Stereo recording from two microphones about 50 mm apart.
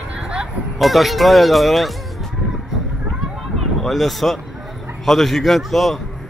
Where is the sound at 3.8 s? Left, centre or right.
Centre.